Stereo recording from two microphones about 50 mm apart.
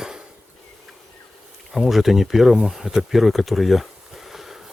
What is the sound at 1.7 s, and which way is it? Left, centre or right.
Speech, centre.